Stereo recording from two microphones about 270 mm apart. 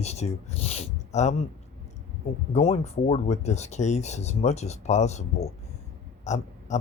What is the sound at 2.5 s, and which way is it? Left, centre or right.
Speech, left.